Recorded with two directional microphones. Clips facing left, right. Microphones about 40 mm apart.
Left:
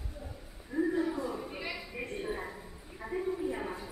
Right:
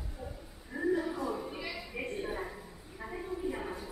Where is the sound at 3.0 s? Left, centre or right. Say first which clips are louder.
Left 4 dB; centre.